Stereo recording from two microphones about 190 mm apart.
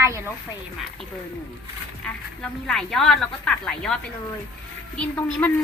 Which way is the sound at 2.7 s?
5° left (ahead or behind).